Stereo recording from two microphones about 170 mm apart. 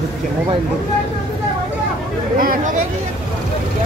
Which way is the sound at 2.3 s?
50° right (ahead or behind).